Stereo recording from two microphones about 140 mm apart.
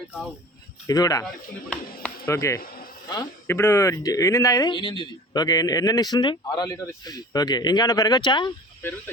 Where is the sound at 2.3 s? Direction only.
20° left (ahead or behind).